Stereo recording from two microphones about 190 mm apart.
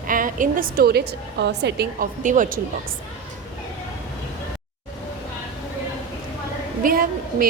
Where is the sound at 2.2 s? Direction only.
45° right (ahead or behind).